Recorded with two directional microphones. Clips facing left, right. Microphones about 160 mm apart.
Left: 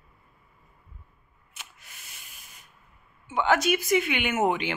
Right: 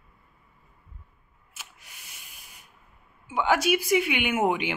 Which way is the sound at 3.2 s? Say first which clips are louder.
Even; 10° right (ahead or behind).